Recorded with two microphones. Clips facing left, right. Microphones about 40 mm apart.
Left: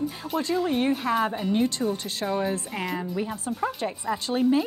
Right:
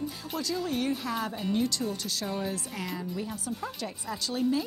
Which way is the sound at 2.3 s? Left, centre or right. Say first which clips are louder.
Left 9 dB; centre.